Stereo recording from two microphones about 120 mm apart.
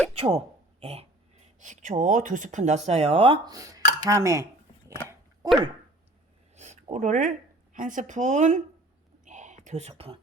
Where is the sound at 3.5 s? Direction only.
30° right (ahead or behind).